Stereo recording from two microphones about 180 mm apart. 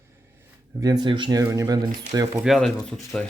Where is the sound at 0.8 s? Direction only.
25° right (ahead or behind).